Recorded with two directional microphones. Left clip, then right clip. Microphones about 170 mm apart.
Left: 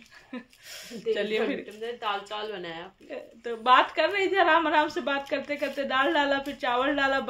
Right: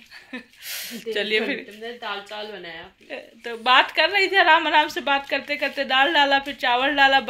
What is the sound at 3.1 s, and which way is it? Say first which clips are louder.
A woman's voice: right 3 dB; centre (ahead or behind).